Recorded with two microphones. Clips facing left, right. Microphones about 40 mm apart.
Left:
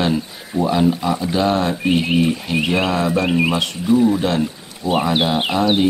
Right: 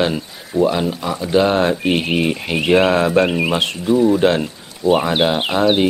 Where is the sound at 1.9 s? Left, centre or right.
Right.